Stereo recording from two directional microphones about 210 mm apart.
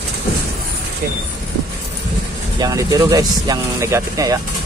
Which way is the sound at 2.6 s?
15° right (ahead or behind).